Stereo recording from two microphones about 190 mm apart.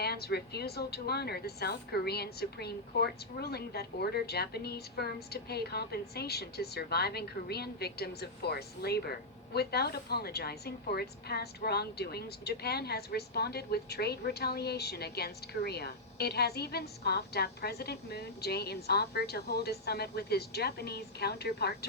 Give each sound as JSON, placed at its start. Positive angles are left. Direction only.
{"t": 0.0, "sound": "a woman's voice", "side_deg": 55}